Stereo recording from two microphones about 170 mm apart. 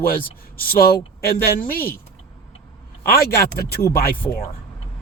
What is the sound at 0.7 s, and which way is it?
Speech, 60° left (ahead or behind).